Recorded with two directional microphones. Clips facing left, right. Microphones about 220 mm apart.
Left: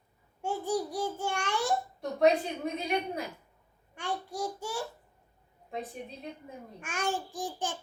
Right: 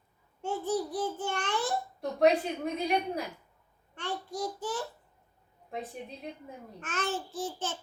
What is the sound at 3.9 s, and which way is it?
Speech, 10° left (ahead or behind).